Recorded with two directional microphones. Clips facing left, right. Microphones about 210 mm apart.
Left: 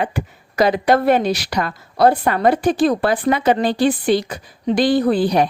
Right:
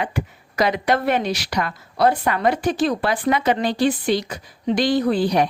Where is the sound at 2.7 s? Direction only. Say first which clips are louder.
Left 4 dB; 50° left (ahead or behind).